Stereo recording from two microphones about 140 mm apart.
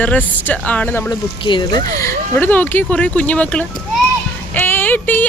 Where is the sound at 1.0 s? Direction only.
35° left (ahead or behind).